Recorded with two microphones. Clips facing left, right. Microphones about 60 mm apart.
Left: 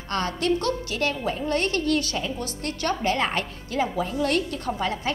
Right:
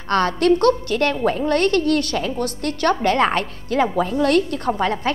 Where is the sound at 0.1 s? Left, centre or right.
Right.